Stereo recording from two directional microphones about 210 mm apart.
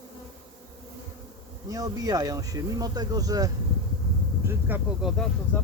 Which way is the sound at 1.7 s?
15° right (ahead or behind).